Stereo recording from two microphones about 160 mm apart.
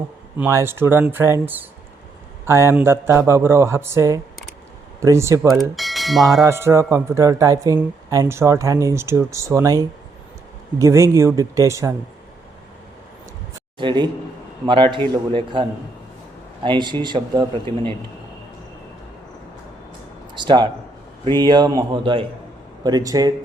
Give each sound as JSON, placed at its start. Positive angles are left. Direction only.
{"t": 0.3, "sound": "speech", "side_deg": -15}
{"t": 5.5, "sound": "speech", "side_deg": 0}
{"t": 6.4, "sound": "speech", "side_deg": -15}
{"t": 13.7, "sound": "a man's voice", "side_deg": -30}
{"t": 16.6, "sound": "speech", "side_deg": -30}
{"t": 20.3, "sound": "a man's voice", "side_deg": -30}